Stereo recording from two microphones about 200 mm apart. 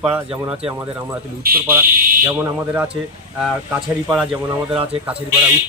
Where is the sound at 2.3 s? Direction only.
5° right (ahead or behind).